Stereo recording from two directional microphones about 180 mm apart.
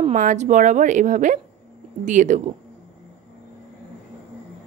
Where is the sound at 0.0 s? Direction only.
45° right (ahead or behind).